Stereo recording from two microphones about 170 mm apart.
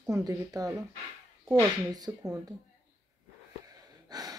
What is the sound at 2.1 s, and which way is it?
Speech, 15° right (ahead or behind).